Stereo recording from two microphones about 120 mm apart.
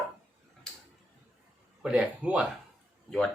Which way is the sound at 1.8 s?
10° right (ahead or behind).